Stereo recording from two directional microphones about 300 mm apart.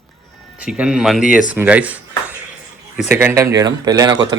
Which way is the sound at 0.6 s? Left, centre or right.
Centre.